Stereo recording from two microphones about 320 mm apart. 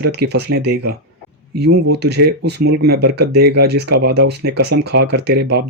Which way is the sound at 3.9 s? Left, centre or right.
Right.